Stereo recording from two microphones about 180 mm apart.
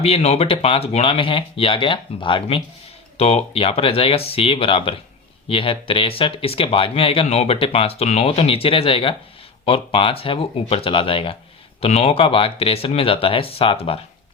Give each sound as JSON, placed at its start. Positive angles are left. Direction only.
{"t": 0.0, "sound": "speech", "side_deg": 35}